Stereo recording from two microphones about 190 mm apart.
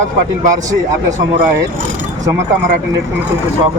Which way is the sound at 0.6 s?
15° right (ahead or behind).